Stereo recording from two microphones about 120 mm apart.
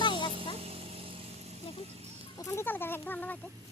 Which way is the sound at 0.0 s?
40° left (ahead or behind).